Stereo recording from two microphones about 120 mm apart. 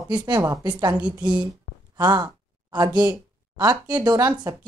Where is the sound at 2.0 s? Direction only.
35° right (ahead or behind).